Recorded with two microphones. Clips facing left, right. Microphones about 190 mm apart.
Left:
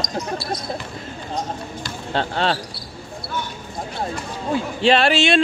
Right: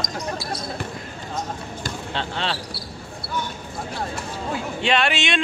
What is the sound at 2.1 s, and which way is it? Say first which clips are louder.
Speech: left 7 dB; 45° left (ahead or behind).